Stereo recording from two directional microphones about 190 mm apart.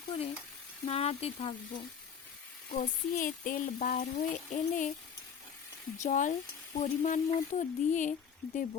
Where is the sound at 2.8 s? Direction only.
45° left (ahead or behind).